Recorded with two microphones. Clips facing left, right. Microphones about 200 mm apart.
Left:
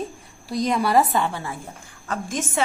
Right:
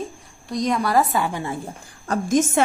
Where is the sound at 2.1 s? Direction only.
40° right (ahead or behind).